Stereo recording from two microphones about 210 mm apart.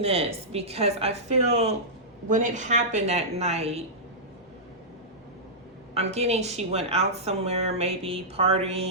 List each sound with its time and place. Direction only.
0.0 s a woman's voice: 30° right (ahead or behind)
5.9 s speech: 30° right (ahead or behind)